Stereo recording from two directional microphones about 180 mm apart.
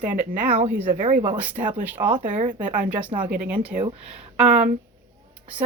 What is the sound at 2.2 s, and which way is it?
Speech, 45° right (ahead or behind).